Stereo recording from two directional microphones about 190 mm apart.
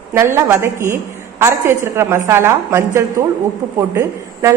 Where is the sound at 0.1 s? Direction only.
15° right (ahead or behind).